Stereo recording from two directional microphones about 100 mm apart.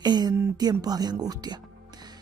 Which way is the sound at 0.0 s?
45° right (ahead or behind).